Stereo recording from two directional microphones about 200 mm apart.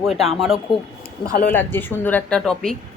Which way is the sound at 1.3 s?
45° left (ahead or behind).